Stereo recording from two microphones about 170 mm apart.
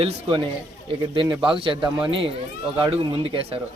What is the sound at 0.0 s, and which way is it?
A man's voice, 30° right (ahead or behind).